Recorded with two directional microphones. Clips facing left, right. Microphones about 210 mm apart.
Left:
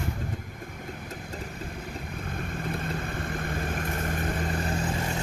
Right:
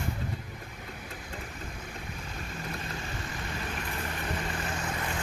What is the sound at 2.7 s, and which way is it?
Vehicle, 55° left (ahead or behind).